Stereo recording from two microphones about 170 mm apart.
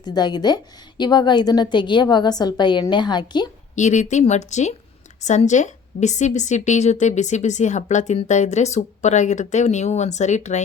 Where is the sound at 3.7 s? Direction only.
45° left (ahead or behind).